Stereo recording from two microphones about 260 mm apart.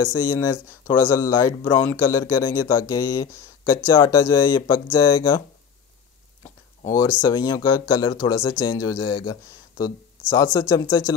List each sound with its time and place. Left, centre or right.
0.0 s speech: centre
6.9 s speech: centre